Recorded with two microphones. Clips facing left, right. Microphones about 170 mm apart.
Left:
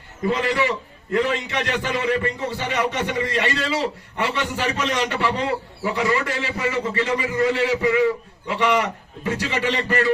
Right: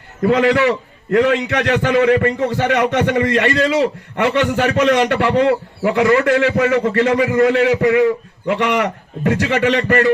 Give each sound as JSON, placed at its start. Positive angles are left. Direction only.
{"t": 0.2, "sound": "a man's voice", "side_deg": -60}